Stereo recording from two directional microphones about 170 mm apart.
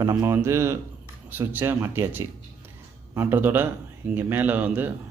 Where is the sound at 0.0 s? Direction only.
15° right (ahead or behind).